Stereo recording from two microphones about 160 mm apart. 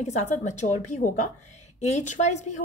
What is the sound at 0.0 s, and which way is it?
A woman's voice, 50° left (ahead or behind).